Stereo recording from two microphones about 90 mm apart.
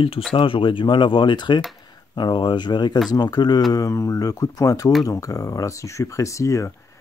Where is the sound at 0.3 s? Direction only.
70° left (ahead or behind); by 3.6 s 50° left (ahead or behind).